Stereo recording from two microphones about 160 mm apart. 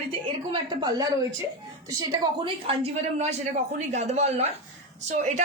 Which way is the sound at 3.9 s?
45° right (ahead or behind).